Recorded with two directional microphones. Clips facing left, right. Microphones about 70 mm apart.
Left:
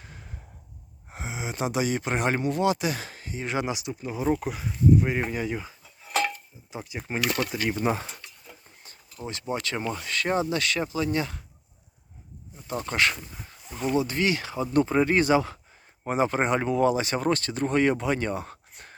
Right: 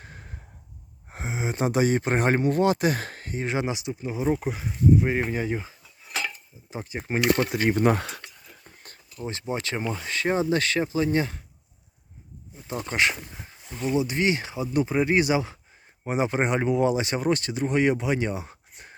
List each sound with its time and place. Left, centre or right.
0.0 s a sound: right
1.1 s speech: right
3.4 s speech: right
6.7 s speech: right
7.8 s a sound: right
9.2 s speech: right
12.8 s speech: centre
14.5 s speech: centre